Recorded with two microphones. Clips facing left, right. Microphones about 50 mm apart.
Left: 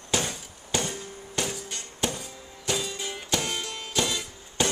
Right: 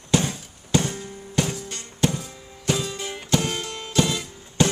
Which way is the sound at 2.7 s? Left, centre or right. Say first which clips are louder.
Right 4 dB; centre.